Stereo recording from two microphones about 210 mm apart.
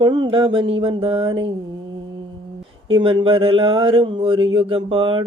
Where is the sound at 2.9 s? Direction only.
25° right (ahead or behind).